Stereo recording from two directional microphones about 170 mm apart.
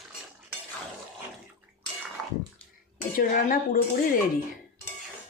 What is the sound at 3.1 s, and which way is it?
Speech, 55° left (ahead or behind).